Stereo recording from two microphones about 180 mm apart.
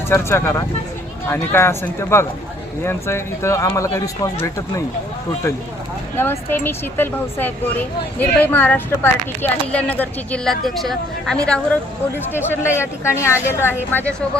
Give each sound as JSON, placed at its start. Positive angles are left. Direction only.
{"t": 0.1, "sound": "speech", "side_deg": 15}
{"t": 6.1, "sound": "speech", "side_deg": 10}